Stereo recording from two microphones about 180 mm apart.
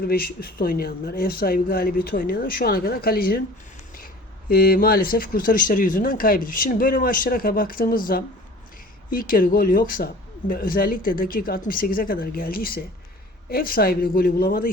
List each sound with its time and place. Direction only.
0.0 s speech: 60° left (ahead or behind)